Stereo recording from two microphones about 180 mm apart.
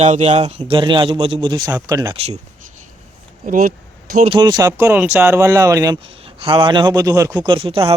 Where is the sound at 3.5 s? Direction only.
50° right (ahead or behind).